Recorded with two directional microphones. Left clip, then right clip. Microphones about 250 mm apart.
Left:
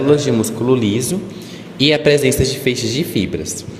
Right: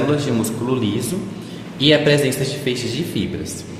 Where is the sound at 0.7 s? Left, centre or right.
Left.